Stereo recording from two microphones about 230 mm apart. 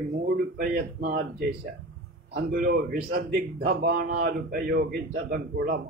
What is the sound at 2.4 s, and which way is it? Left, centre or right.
A man's voice, right.